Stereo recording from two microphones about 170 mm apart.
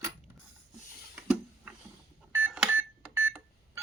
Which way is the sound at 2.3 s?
10° right (ahead or behind).